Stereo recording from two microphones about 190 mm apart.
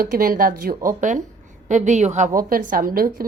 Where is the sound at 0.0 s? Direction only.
50° right (ahead or behind).